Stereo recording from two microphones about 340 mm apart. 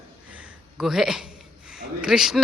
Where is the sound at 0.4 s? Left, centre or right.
Centre.